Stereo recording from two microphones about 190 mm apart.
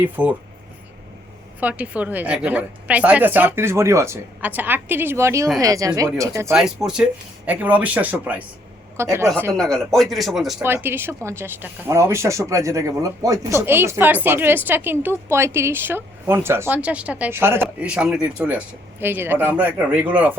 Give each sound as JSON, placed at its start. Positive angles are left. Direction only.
{"t": 0.0, "sound": "speech", "side_deg": -10}
{"t": 1.6, "sound": "speech", "side_deg": -5}
{"t": 6.5, "sound": "speech", "side_deg": 0}
{"t": 9.6, "sound": "speech", "side_deg": 5}